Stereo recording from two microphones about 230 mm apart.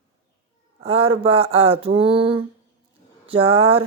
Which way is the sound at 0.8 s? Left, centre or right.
Right.